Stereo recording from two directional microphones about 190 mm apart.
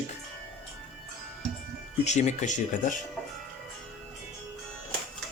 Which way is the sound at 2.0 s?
40° left (ahead or behind).